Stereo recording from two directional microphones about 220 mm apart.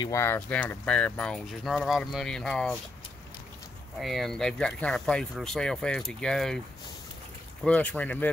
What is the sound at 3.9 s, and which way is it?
Speech, centre (ahead or behind).